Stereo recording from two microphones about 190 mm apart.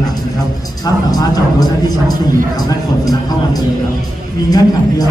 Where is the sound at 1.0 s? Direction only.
20° left (ahead or behind).